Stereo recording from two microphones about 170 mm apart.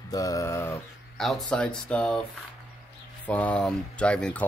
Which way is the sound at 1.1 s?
Centre (ahead or behind).